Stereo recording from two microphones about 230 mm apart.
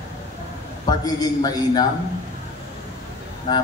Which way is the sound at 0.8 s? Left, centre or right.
Centre.